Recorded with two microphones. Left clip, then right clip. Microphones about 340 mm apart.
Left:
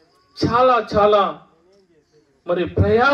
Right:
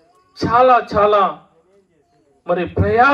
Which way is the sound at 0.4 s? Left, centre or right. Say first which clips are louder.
Right 3 dB; right.